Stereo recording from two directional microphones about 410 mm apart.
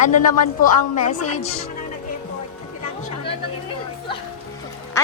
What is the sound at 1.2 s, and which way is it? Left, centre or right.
Speech, left.